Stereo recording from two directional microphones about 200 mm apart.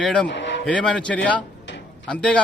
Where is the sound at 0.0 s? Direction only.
5° left (ahead or behind).